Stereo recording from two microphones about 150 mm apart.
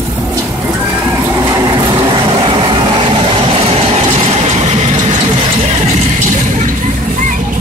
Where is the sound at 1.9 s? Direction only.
35° right (ahead or behind).